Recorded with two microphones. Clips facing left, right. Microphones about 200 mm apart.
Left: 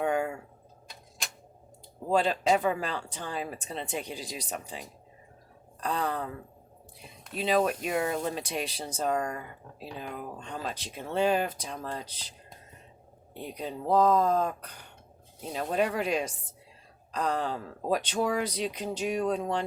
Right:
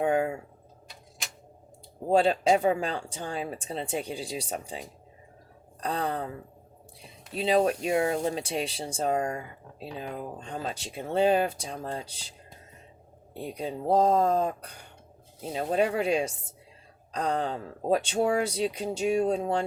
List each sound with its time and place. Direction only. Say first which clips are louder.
2.0 s speech: right 3 dB; 30° right (ahead or behind)
5.8 s speech: right 1 dB; 35° right (ahead or behind)
7.3 s speech: right 2 dB; 35° right (ahead or behind)
13.5 s speech: right 2 dB; 30° right (ahead or behind)